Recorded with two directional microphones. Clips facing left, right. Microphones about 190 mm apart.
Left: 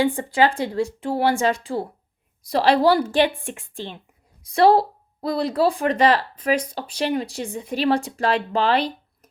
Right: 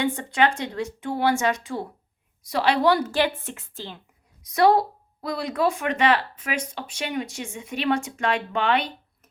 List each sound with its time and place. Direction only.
0.0 s speech: 30° left (ahead or behind)
4.4 s speech: 30° left (ahead or behind)